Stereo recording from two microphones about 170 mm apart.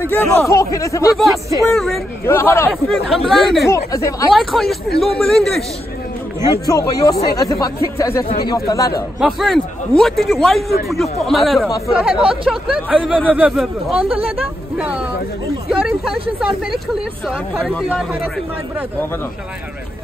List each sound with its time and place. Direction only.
0.1 s speech: 10° left (ahead or behind)
1.1 s a man's voice: centre (ahead or behind)
2.2 s speech: 15° left (ahead or behind)
3.1 s a man's voice: centre (ahead or behind)
3.7 s speech: 20° left (ahead or behind)
4.3 s a man's voice: centre (ahead or behind)
6.6 s speech: 20° left (ahead or behind)
9.2 s a man's voice: centre (ahead or behind)